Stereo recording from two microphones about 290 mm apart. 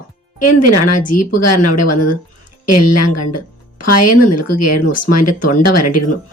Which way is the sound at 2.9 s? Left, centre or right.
Left.